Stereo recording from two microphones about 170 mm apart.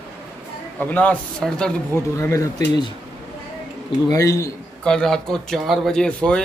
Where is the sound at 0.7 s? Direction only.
10° left (ahead or behind).